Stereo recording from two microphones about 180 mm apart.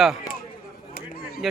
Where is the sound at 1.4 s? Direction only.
Centre (ahead or behind).